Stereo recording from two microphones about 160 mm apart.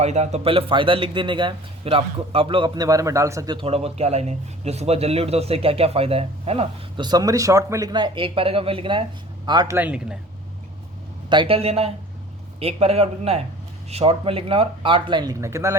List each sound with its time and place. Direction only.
0.0 s a man's voice: 45° right (ahead or behind); by 9.7 s 25° right (ahead or behind)
9.7 s a man's voice: 10° right (ahead or behind)
11.3 s a man's voice: 35° right (ahead or behind); by 15.8 s 15° right (ahead or behind)